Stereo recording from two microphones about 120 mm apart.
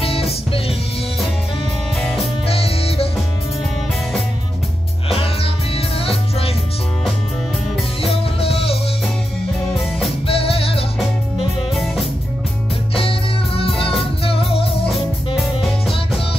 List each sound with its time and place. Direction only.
0.0 s music: 55° left (ahead or behind)
2.4 s music: 55° left (ahead or behind)
5.1 s music: 50° left (ahead or behind)
8.2 s music: 55° left (ahead or behind)
9.8 s music: centre (ahead or behind)
10.2 s music: 55° left (ahead or behind)
11.0 s music: centre (ahead or behind)
14.2 s music: 50° left (ahead or behind)